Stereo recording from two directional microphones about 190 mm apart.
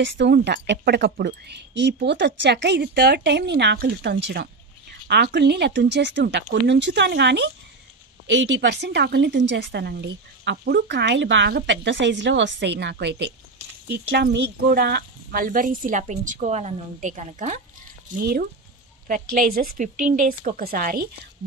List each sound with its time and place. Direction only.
0.0 s a woman's voice: 70° right (ahead or behind); by 17.6 s 40° right (ahead or behind)
18.2 s speech: 55° right (ahead or behind)